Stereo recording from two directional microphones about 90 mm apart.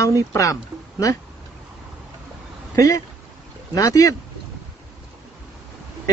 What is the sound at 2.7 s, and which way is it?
Speech, 40° left (ahead or behind).